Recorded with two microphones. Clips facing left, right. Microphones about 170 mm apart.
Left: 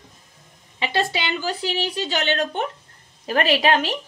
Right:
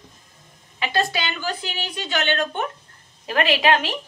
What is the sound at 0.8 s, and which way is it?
A woman's voice, 25° left (ahead or behind).